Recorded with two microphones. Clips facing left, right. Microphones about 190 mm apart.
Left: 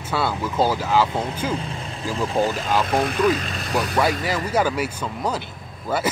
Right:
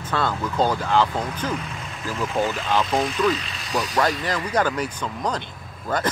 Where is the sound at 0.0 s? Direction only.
10° left (ahead or behind).